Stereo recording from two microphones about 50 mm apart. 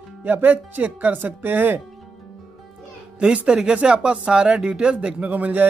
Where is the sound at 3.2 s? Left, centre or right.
Right.